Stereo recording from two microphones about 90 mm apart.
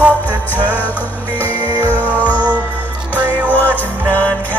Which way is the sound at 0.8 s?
20° left (ahead or behind).